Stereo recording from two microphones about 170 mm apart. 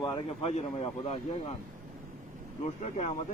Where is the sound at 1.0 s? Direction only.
40° left (ahead or behind).